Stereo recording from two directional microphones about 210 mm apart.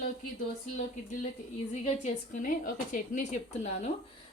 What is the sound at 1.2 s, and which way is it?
A woman's voice, 35° left (ahead or behind).